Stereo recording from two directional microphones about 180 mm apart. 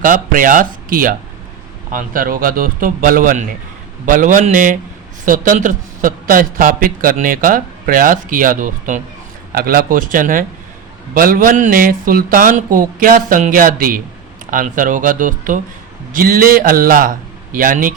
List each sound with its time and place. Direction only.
0.0 s a man's voice: 50° right (ahead or behind)